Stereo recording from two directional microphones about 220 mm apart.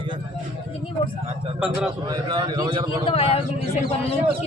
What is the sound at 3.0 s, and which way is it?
Speech, 25° left (ahead or behind).